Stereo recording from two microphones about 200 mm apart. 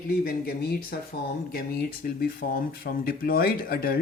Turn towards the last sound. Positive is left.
turn(degrees=50)  # may be behind; listen again after turning